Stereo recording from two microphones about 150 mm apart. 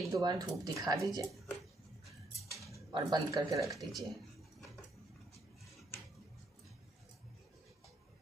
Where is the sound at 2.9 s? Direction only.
25° right (ahead or behind).